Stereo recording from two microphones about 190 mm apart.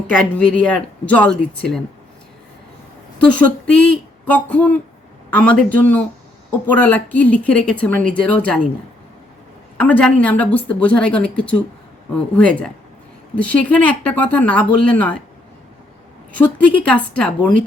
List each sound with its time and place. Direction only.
0.1 s speech: 5° left (ahead or behind)
3.4 s speech: 5° left (ahead or behind)
9.7 s speech: 10° left (ahead or behind)
16.3 s speech: 10° left (ahead or behind)